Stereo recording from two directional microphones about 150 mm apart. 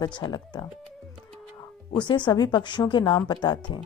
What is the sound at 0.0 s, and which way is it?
Speech, 30° left (ahead or behind).